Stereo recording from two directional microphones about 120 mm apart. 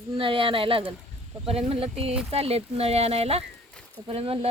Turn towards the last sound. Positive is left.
turn(degrees=-55)  # may be behind; listen again after turning